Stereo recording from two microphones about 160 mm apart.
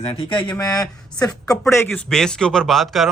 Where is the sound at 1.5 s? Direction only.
15° left (ahead or behind); by 3.1 s centre (ahead or behind).